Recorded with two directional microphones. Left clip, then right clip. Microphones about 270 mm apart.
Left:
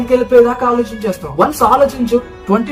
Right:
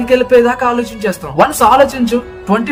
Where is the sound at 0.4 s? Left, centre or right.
Right.